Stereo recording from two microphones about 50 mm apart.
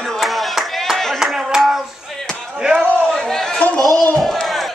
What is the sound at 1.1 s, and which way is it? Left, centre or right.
Clapping, centre.